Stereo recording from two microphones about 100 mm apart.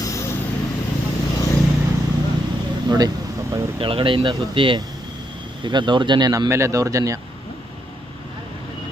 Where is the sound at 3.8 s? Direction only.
60° right (ahead or behind); by 7.2 s 35° right (ahead or behind).